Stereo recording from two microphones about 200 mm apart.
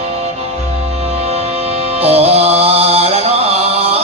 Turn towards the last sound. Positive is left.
turn(degrees=-30)  # may be behind; listen again after turning